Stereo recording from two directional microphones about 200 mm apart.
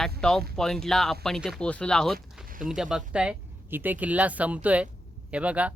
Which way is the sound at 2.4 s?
45° right (ahead or behind).